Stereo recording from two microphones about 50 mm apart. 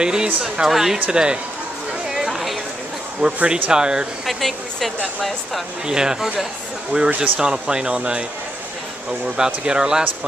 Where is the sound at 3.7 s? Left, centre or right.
Centre.